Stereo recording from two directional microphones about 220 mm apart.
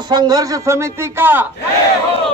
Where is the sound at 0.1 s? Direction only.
20° right (ahead or behind).